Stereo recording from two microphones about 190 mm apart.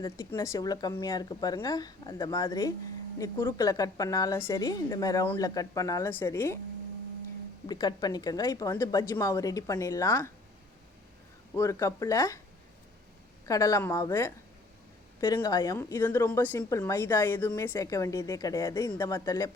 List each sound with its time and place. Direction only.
0.0 s a woman's voice: 15° left (ahead or behind)
7.7 s a woman's voice: 20° left (ahead or behind)
11.5 s a woman's voice: 15° left (ahead or behind)
13.4 s a woman's voice: 15° left (ahead or behind)